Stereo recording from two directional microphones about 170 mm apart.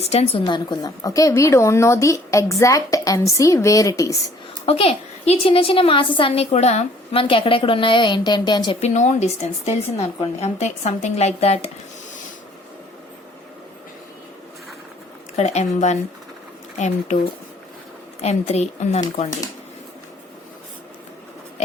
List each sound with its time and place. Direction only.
0.0 s a woman's voice: 35° left (ahead or behind); by 4.2 s 20° left (ahead or behind)
4.6 s a woman's voice: 35° left (ahead or behind)
8.8 s a woman's voice: 40° left (ahead or behind)
15.4 s a woman's voice: 40° left (ahead or behind)
18.2 s a woman's voice: 40° left (ahead or behind)